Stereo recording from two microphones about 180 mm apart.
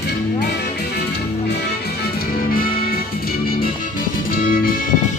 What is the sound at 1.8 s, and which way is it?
Music, 55° left (ahead or behind).